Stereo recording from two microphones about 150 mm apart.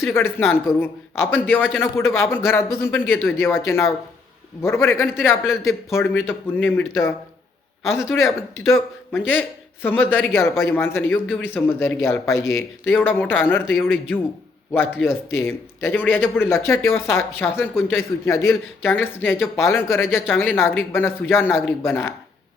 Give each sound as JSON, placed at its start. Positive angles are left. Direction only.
{"t": 0.0, "sound": "speech", "side_deg": 15}